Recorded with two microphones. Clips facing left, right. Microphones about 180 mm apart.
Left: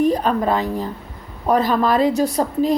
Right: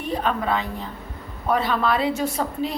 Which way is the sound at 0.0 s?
40° left (ahead or behind).